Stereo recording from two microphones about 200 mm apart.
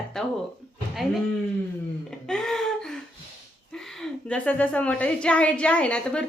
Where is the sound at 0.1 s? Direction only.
Centre (ahead or behind).